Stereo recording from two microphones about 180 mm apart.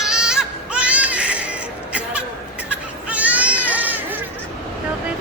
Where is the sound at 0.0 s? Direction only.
5° right (ahead or behind).